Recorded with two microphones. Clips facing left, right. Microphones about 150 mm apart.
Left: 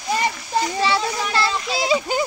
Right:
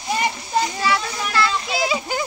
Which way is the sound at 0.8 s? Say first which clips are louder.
Left 2 dB; 25° left (ahead or behind).